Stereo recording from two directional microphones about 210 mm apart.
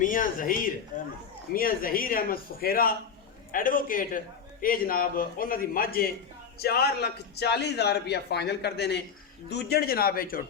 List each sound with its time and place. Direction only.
0.0 s a man's voice: 40° left (ahead or behind)